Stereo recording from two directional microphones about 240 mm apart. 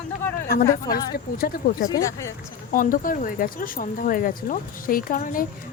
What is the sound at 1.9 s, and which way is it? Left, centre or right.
Speech, centre.